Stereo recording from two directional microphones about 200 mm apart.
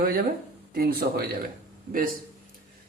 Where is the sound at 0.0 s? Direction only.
45° right (ahead or behind).